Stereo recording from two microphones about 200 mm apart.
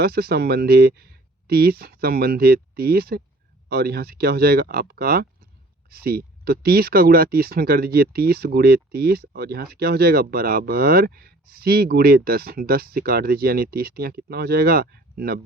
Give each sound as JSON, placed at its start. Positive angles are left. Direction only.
{"t": 0.0, "sound": "speech", "side_deg": -50}